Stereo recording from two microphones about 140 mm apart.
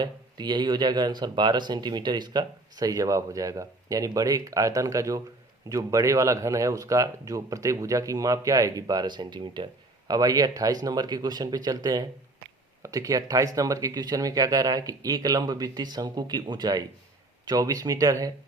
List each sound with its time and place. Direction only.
0.0 s speech: 30° right (ahead or behind)